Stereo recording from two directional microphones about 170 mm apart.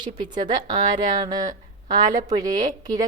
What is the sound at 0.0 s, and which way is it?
A woman's voice, 25° right (ahead or behind).